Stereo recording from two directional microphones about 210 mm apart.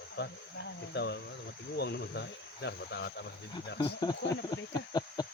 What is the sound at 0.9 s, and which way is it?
Speech, 55° left (ahead or behind).